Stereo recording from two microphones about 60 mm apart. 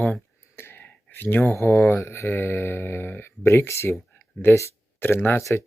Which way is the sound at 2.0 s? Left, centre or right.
Left.